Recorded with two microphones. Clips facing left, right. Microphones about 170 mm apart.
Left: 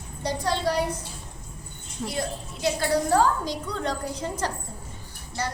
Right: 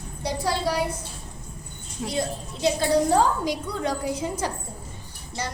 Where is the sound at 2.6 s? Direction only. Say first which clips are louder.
Right 3 dB; 20° right (ahead or behind).